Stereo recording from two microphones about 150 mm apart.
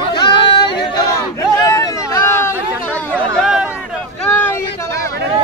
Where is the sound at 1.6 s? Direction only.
20° left (ahead or behind).